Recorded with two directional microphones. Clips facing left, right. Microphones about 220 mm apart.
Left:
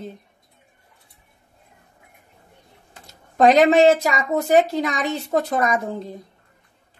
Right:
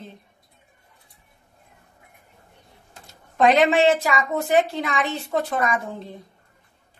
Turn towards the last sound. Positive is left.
turn(degrees=40)  # may be behind; listen again after turning